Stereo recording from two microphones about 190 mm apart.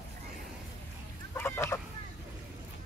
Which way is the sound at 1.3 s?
10° left (ahead or behind).